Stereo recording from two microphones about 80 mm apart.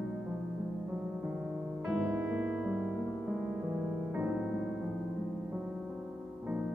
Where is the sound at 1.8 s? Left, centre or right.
Centre.